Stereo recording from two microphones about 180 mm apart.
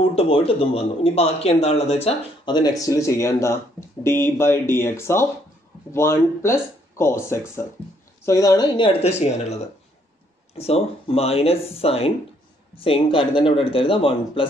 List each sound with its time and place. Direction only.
0.1 s speech: 30° left (ahead or behind)
2.0 s a man's voice: 25° left (ahead or behind)
10.6 s a man's voice: 35° left (ahead or behind)